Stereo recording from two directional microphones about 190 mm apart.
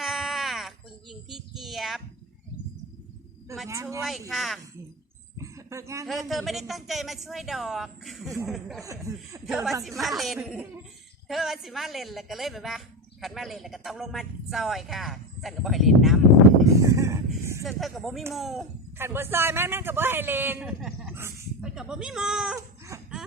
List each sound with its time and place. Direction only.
0.0 s a sound: centre (ahead or behind)
3.7 s a man's voice: 15° right (ahead or behind)
4.3 s a man's voice: centre (ahead or behind)
5.4 s a sound: 15° right (ahead or behind)
6.1 s a man's voice: centre (ahead or behind)
8.8 s a man's voice: 15° right (ahead or behind)
9.5 s a man's voice: centre (ahead or behind)
16.7 s a sound: 15° right (ahead or behind)
17.6 s a man's voice: centre (ahead or behind)
18.9 s a man's voice: 10° right (ahead or behind)
22.9 s laughter: 15° right (ahead or behind)